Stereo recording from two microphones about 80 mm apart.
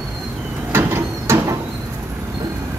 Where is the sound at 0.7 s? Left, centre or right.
Right.